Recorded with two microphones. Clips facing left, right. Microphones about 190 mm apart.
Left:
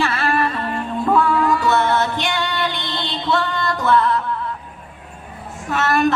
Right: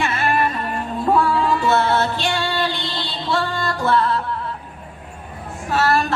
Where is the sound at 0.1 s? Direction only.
20° right (ahead or behind).